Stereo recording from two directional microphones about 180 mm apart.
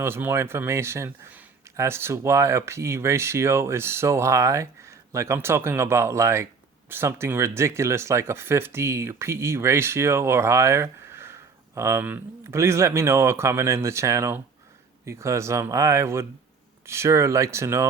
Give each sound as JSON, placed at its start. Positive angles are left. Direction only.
{"t": 0.0, "sound": "speech", "side_deg": -10}